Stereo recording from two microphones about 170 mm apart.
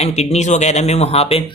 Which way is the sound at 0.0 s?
40° left (ahead or behind).